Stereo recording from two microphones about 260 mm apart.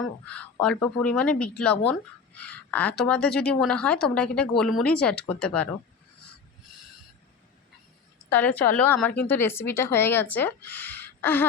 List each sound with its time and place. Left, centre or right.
0.3 s speech: centre
6.7 s owl: centre
8.3 s speech: centre